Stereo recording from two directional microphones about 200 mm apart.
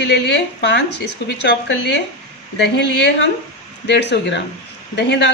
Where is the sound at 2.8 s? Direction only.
60° left (ahead or behind).